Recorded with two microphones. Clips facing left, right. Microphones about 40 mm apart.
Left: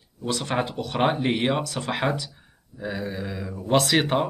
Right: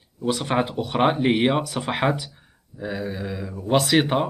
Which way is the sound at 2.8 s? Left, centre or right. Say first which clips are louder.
Right 1 dB; centre.